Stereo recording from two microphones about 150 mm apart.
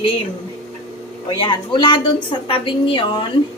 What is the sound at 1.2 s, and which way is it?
A woman's voice, 30° left (ahead or behind).